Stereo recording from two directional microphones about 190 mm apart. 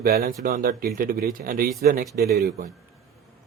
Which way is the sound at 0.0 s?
50° right (ahead or behind).